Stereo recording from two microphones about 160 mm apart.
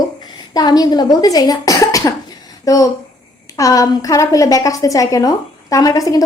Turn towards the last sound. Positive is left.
turn(degrees=25)  # may be behind; listen again after turning